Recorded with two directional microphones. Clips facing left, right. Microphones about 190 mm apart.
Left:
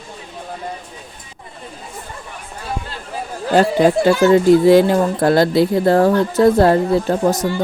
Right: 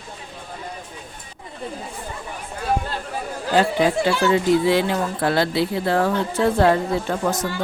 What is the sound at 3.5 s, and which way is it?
Speech, 45° left (ahead or behind).